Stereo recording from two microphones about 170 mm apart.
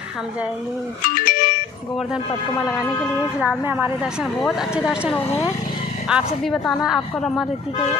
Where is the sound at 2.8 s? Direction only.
20° left (ahead or behind).